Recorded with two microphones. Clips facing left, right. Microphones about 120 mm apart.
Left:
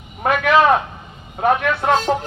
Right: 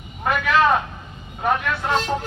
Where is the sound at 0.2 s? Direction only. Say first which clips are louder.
Left 4 dB; 70° left (ahead or behind).